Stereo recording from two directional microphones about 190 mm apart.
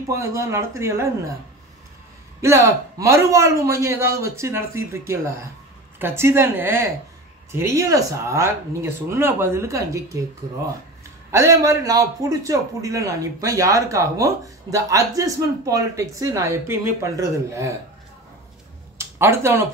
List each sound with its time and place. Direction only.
0.1 s a man's voice: 15° right (ahead or behind)
2.4 s a man's voice: 15° right (ahead or behind)
11.3 s a man's voice: 15° right (ahead or behind)
18.9 s speech: 15° right (ahead or behind)